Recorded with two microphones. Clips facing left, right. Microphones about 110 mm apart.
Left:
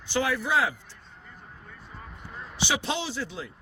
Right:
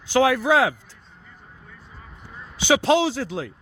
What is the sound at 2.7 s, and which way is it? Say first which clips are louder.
Speech: right 13 dB; 90° right.